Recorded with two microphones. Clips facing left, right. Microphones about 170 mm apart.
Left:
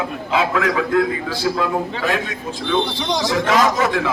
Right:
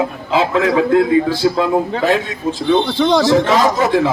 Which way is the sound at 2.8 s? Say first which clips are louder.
Right 9 dB; 60° right (ahead or behind).